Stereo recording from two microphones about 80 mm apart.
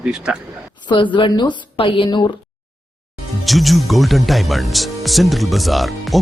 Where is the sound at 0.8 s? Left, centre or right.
Left.